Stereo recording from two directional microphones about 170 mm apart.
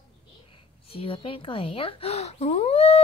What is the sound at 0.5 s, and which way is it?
A woman's voice, 30° left (ahead or behind).